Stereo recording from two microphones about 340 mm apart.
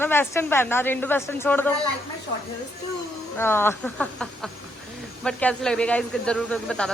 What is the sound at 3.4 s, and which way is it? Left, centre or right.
A man's voice, centre.